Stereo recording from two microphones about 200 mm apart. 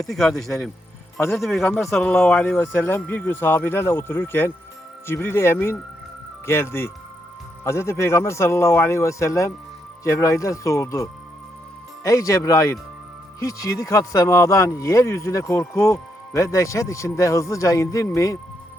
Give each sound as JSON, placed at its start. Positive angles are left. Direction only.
{"t": 0.1, "sound": "speech", "side_deg": 0}